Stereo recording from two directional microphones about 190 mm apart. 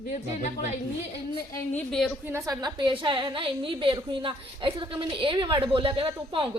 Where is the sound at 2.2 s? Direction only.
15° right (ahead or behind).